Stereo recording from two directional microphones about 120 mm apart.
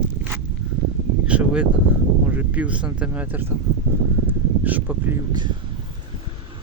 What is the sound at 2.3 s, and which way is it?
Speech, 15° right (ahead or behind).